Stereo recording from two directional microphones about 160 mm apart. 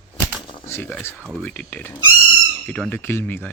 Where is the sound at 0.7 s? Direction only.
15° left (ahead or behind).